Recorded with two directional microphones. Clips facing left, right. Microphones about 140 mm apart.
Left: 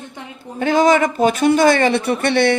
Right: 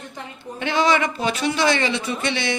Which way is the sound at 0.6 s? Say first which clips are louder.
Left 6 dB; 45° left (ahead or behind).